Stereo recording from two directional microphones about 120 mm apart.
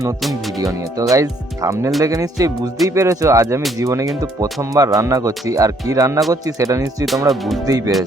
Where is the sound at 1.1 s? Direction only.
25° right (ahead or behind).